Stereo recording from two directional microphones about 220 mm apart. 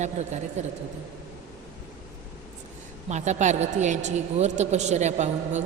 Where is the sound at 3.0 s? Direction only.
30° right (ahead or behind).